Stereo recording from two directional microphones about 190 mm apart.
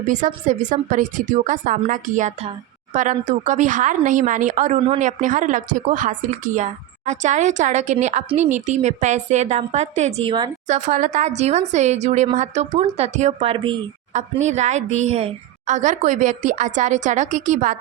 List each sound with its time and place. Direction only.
0.1 s a woman's voice: 40° right (ahead or behind); by 10.5 s 25° right (ahead or behind)
10.7 s a woman's voice: 40° right (ahead or behind)